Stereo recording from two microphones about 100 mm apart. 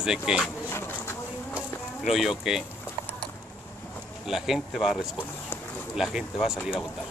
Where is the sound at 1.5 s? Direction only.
5° right (ahead or behind).